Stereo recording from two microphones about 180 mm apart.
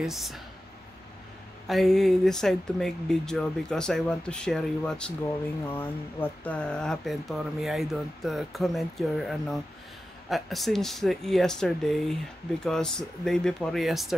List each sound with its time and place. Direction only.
0.0 s speech: centre (ahead or behind)
1.7 s speech: centre (ahead or behind)